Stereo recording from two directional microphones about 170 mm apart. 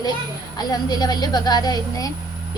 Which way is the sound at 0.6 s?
25° left (ahead or behind).